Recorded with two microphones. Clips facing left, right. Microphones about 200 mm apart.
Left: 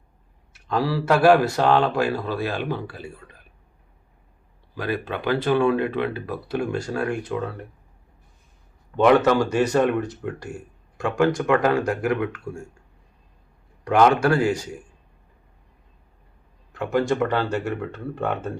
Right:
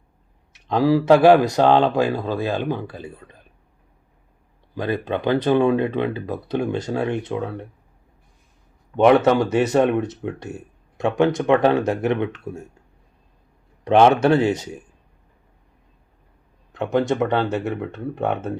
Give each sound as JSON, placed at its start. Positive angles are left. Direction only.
{"t": 0.8, "sound": "speech", "side_deg": -15}
{"t": 4.7, "sound": "speech", "side_deg": -20}
{"t": 9.0, "sound": "speech", "side_deg": -20}
{"t": 13.8, "sound": "speech", "side_deg": -25}
{"t": 16.7, "sound": "speech", "side_deg": -20}